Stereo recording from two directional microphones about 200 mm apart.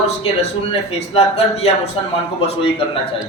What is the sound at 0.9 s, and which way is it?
A man's voice, 30° left (ahead or behind).